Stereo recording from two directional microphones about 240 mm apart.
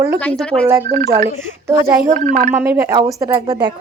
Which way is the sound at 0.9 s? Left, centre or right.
Right.